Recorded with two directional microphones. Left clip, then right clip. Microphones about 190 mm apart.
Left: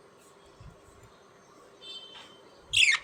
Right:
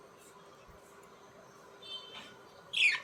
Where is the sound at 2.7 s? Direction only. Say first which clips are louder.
Left 6 dB; 50° left (ahead or behind).